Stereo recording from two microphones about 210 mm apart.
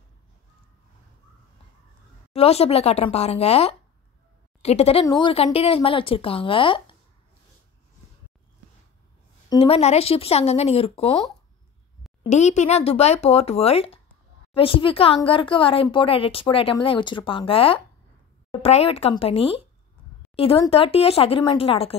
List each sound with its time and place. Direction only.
2.3 s a woman's voice: 30° left (ahead or behind)
9.5 s a woman's voice: 25° left (ahead or behind)